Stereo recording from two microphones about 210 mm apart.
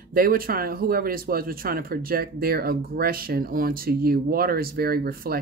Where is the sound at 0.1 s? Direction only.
45° right (ahead or behind).